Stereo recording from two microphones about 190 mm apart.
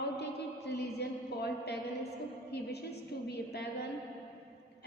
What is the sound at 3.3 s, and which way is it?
Speech, 60° left (ahead or behind).